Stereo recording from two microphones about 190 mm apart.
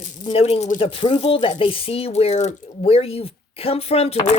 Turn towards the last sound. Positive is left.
turn(degrees=35)  # may be behind; listen again after turning